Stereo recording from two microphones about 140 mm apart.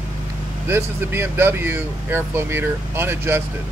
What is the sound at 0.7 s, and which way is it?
Speech, 15° right (ahead or behind).